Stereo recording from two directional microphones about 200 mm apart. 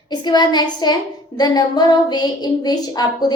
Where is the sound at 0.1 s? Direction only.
20° left (ahead or behind).